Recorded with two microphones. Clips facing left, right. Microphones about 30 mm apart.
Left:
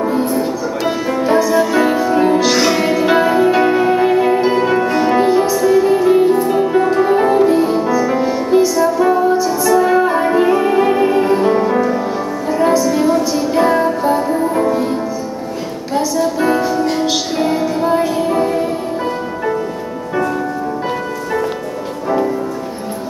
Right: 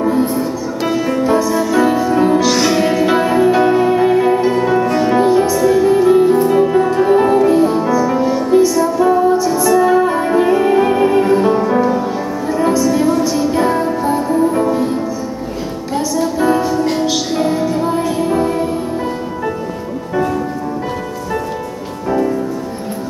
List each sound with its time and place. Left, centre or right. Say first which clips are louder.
0.0 s music: right 1 dB; centre
1.4 s music: left 1 dB; centre
4.5 s music: even; left
6.3 s music: right 2 dB; centre
6.6 s music: right 1 dB; centre
9.5 s music: right 1 dB; centre
16.3 s music: right 1 dB; centre